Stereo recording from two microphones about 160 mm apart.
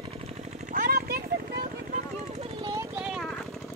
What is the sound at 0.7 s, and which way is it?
Vehicle, 65° right (ahead or behind).